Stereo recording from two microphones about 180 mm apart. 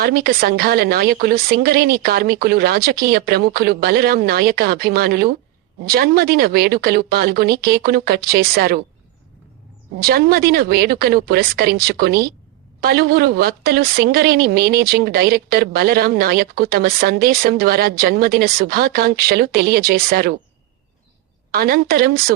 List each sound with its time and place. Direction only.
0.0 s a woman's voice: 60° right (ahead or behind)
10.0 s a woman's voice: 60° right (ahead or behind)
21.5 s a woman's voice: 55° right (ahead or behind)